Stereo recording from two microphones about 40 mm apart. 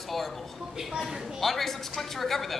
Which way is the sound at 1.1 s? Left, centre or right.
Centre.